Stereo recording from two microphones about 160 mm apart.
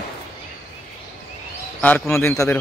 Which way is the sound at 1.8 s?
15° left (ahead or behind).